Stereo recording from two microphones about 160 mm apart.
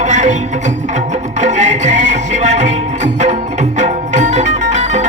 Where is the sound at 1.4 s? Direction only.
50° right (ahead or behind).